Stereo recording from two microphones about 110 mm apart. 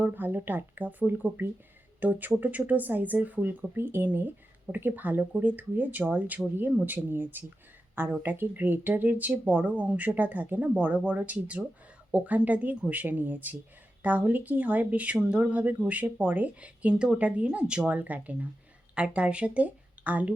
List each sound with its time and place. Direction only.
0.0 s speech: 15° right (ahead or behind)